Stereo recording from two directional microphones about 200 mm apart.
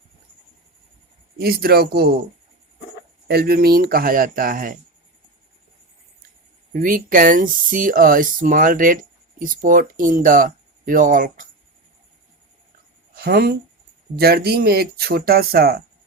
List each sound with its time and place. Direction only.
1.4 s speech: 50° right (ahead or behind)
3.2 s speech: 50° right (ahead or behind)
6.7 s speech: 45° right (ahead or behind)
13.1 s speech: 50° right (ahead or behind)